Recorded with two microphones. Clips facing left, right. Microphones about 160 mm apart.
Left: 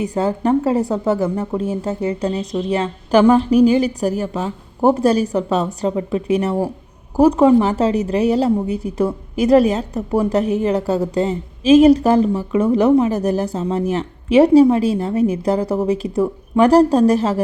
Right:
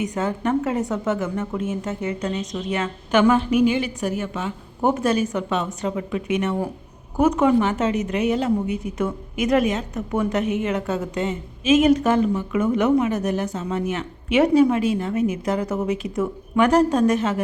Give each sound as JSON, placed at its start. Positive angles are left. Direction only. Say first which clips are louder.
{"t": 0.0, "sound": "a woman's voice", "louder": "left 5 dB", "side_deg": 35}